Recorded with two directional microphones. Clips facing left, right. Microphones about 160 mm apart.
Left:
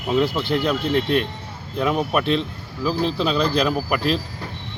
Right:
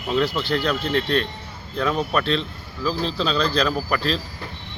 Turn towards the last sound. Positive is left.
turn(degrees=10)  # may be behind; listen again after turning